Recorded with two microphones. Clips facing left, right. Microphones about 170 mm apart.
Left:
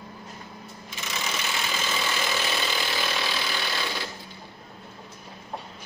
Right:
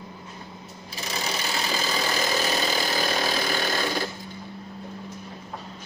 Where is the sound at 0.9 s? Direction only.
35° right (ahead or behind).